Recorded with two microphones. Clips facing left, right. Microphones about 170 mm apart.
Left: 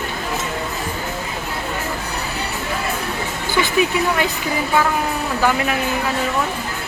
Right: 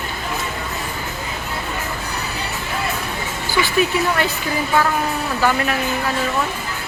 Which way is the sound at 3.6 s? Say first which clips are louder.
Even; 15° left (ahead or behind).